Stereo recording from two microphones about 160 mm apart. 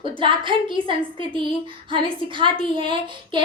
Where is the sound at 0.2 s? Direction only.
30° right (ahead or behind).